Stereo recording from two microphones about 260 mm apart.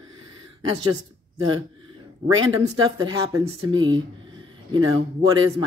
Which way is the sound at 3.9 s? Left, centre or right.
Centre.